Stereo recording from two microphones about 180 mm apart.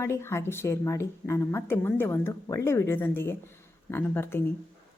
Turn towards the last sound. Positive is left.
turn(degrees=10)  # may be behind; listen again after turning